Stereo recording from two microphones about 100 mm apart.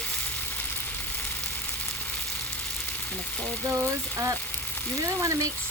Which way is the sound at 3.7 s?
30° right (ahead or behind).